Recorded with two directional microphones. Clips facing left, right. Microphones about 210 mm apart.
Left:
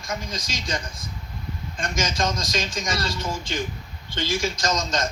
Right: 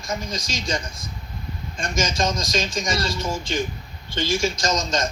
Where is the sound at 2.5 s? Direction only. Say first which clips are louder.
Right 3 dB; 25° right (ahead or behind).